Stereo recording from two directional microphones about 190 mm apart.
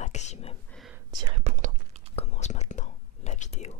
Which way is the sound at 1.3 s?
35° right (ahead or behind).